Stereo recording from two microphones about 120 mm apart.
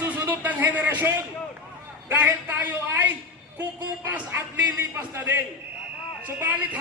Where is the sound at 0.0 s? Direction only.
15° right (ahead or behind).